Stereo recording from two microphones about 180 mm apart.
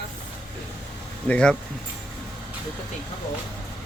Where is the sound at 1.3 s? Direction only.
5° left (ahead or behind).